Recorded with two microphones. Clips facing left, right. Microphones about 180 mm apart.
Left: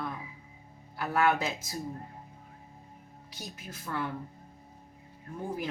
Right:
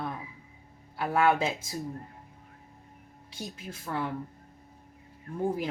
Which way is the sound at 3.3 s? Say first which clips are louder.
Right 4 dB; 25° right (ahead or behind).